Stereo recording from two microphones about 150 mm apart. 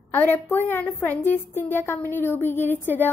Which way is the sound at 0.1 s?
15° left (ahead or behind).